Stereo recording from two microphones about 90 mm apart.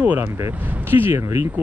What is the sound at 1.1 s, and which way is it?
Speech, 30° right (ahead or behind).